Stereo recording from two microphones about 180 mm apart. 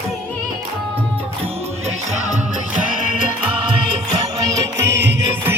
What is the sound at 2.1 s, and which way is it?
Music, 40° right (ahead or behind).